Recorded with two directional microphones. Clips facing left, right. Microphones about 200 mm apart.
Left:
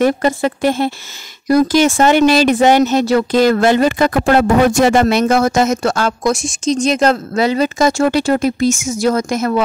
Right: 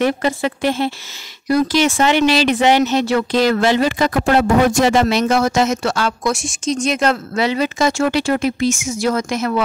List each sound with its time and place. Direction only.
0.0 s speech: 45° left (ahead or behind)